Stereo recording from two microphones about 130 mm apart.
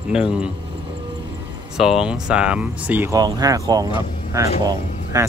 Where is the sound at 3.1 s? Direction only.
30° right (ahead or behind).